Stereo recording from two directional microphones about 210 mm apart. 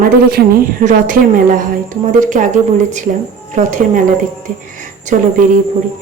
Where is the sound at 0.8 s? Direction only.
40° right (ahead or behind).